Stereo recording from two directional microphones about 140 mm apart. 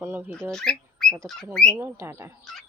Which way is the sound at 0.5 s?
5° left (ahead or behind).